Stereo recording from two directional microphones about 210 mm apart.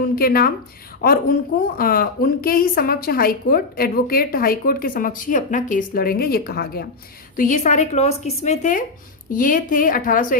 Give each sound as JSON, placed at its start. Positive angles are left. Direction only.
{"t": 0.2, "sound": "a woman's voice", "side_deg": 45}